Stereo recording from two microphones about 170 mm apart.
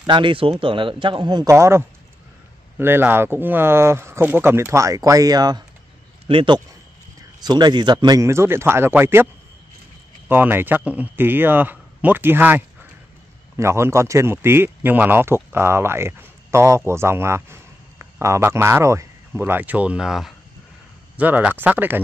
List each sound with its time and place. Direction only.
0.0 s a man's voice: 30° right (ahead or behind); by 22.0 s 10° right (ahead or behind)